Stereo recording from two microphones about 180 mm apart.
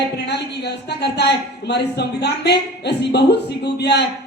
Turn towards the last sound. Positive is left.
turn(degrees=70)  # may be behind; listen again after turning